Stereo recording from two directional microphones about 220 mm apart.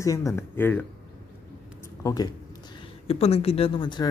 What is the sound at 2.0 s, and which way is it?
Speech, 15° left (ahead or behind).